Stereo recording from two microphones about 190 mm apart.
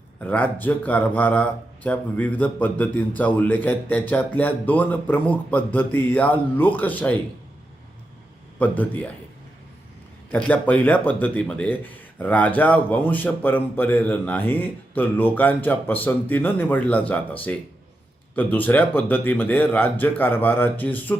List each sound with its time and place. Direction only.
0.2 s speech: 10° left (ahead or behind)
8.5 s speech: 10° left (ahead or behind)
10.3 s speech: 10° left (ahead or behind)